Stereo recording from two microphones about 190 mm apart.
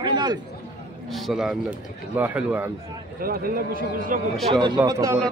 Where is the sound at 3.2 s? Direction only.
50° right (ahead or behind).